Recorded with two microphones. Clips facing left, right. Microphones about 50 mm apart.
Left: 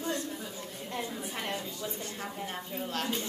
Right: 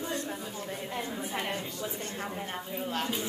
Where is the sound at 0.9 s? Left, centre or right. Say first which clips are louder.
Even; centre.